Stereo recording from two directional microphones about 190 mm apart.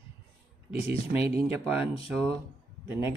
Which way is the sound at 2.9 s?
10° right (ahead or behind).